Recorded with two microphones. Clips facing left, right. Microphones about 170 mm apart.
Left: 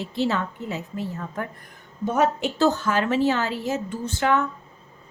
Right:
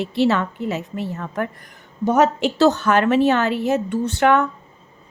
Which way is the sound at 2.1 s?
90° right.